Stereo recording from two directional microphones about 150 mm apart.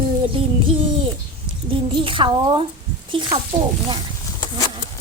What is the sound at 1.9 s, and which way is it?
Speech, 35° right (ahead or behind).